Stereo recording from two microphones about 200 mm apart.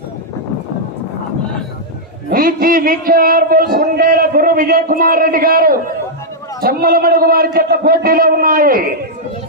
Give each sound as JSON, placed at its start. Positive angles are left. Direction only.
{"t": 2.3, "sound": "a man's voice", "side_deg": -45}